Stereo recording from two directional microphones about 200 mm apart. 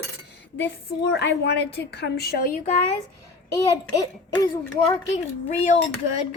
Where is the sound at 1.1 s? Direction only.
55° left (ahead or behind).